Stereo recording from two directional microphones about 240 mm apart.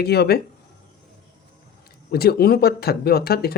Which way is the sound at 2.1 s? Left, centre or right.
Left.